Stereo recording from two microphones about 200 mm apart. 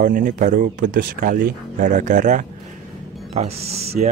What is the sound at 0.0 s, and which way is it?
Speech, 40° right (ahead or behind).